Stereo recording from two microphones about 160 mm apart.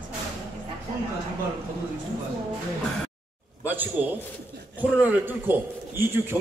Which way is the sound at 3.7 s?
10° right (ahead or behind).